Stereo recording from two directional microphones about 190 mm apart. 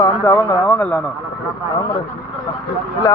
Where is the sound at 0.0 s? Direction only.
15° left (ahead or behind).